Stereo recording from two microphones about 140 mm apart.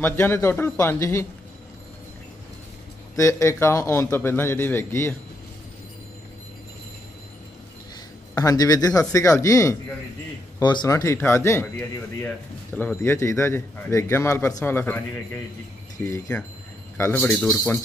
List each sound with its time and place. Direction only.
0.0 s a man's voice: 15° left (ahead or behind)
3.2 s a man's voice: 20° left (ahead or behind)
8.4 s a man's voice: 25° left (ahead or behind)
12.7 s a man's voice: 15° left (ahead or behind)